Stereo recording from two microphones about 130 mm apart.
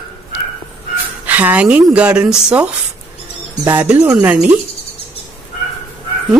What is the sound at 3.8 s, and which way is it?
Speech, 10° right (ahead or behind).